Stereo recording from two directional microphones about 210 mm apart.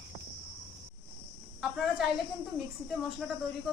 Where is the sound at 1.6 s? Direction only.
Centre (ahead or behind).